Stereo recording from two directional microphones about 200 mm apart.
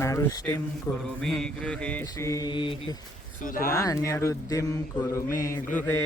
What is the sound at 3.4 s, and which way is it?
Speech, 45° left (ahead or behind).